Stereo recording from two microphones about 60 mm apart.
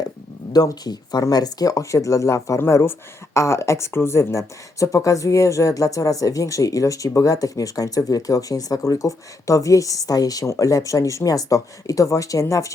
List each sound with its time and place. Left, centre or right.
0.5 s speech: left
2.6 s speech: left
3.3 s speech: left
10.4 s speech: left